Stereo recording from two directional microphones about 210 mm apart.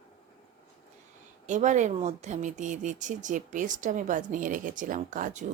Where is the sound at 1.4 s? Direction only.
35° right (ahead or behind).